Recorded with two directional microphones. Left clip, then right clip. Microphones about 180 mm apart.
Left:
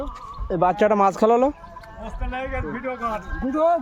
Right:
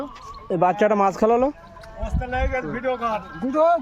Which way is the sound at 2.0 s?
40° right (ahead or behind).